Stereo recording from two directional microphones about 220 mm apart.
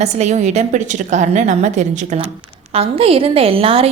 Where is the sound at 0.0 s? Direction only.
30° right (ahead or behind).